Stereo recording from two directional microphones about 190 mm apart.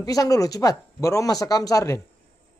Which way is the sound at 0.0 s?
20° left (ahead or behind).